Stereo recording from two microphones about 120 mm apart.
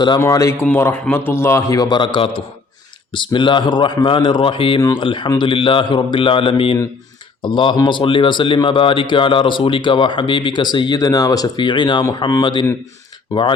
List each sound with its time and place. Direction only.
0.2 s a man's voice: 25° left (ahead or behind)